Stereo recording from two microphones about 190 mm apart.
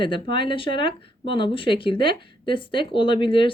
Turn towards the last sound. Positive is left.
turn(degrees=25)  # may be behind; listen again after turning